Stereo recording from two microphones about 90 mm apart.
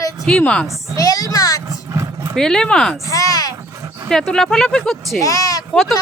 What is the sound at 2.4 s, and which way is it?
Speech, 5° left (ahead or behind).